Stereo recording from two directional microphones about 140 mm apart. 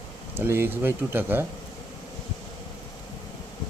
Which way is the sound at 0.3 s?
15° right (ahead or behind).